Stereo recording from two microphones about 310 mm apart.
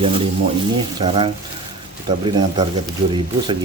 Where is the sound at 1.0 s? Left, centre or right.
Centre.